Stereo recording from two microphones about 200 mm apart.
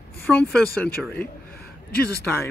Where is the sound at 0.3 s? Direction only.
5° left (ahead or behind).